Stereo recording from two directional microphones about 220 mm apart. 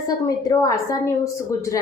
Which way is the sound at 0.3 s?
15° left (ahead or behind).